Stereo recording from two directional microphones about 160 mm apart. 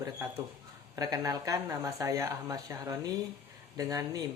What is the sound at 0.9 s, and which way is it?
Speech, 25° right (ahead or behind).